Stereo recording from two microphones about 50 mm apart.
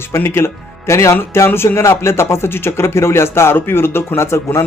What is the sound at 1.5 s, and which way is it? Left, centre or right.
Speech, left.